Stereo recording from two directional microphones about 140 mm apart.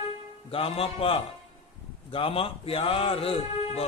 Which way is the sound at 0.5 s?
40° left (ahead or behind).